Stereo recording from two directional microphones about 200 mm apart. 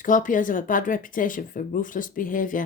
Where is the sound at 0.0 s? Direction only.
40° left (ahead or behind).